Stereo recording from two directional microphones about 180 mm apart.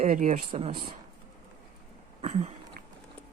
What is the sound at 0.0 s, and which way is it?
Speech, 45° right (ahead or behind).